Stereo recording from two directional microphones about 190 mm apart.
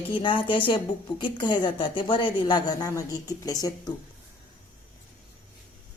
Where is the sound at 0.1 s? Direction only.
25° left (ahead or behind).